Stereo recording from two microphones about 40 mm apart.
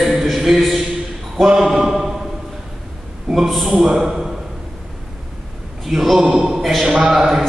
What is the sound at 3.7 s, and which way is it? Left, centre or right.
Speech, centre.